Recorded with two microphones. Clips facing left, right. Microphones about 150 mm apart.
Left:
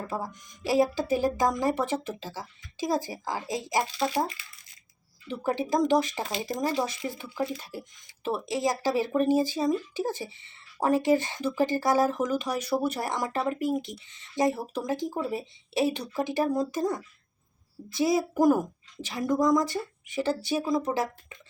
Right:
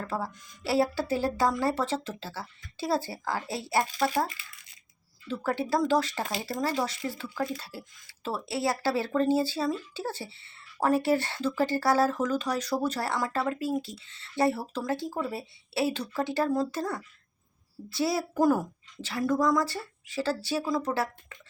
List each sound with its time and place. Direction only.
0.0 s speech: 15° left (ahead or behind)
5.3 s speech: 15° left (ahead or behind)